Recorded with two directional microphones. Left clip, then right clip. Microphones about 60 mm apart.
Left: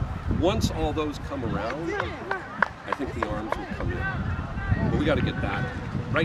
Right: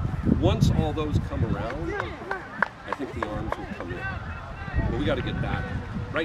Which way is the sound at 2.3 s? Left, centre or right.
Right.